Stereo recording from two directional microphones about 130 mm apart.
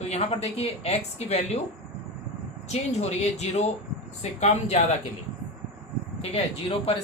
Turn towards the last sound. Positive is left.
turn(degrees=50)  # may be behind; listen again after turning